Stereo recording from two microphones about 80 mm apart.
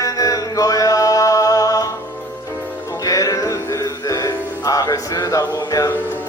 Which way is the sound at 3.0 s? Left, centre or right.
Left.